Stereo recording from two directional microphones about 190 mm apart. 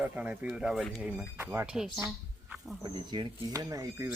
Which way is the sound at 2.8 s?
20° right (ahead or behind).